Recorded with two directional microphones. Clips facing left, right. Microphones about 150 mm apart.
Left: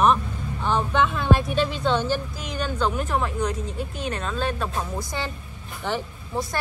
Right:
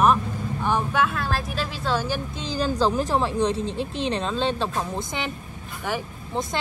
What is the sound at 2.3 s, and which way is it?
Speech, 30° right (ahead or behind).